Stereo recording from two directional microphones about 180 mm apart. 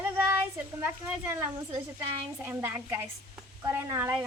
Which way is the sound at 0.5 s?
10° right (ahead or behind).